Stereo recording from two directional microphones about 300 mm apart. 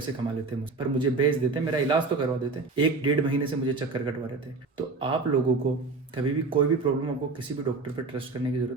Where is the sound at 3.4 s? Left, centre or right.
Centre.